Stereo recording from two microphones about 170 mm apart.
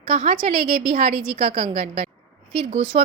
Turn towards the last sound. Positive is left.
turn(degrees=-30)  # may be behind; listen again after turning